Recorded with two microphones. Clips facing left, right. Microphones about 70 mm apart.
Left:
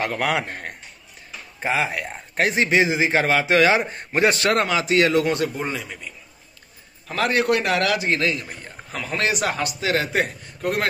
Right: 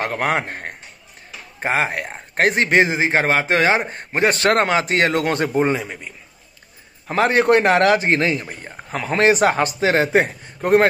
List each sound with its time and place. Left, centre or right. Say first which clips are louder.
0.0 s a man's voice: right 2 dB; right
1.6 s a man's voice: right 3 dB; right